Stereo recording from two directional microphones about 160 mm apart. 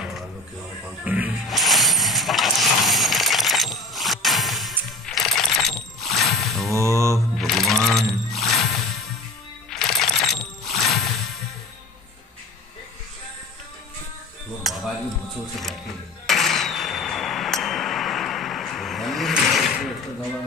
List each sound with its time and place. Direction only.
0.8 s music: 10° right (ahead or behind)
6.7 s mantra: 20° right (ahead or behind)
7.3 s music: centre (ahead or behind)
14.7 s music: centre (ahead or behind)
16.3 s a sound: centre (ahead or behind)